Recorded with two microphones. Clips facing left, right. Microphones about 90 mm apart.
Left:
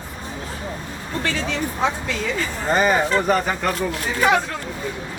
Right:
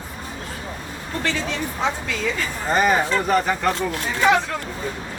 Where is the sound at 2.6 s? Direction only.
Centre (ahead or behind).